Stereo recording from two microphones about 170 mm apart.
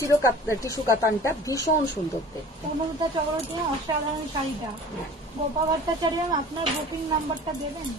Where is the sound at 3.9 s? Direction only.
25° right (ahead or behind).